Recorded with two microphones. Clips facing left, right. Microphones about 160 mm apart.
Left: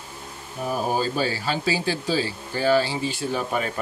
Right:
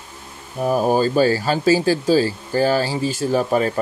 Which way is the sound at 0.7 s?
45° right (ahead or behind).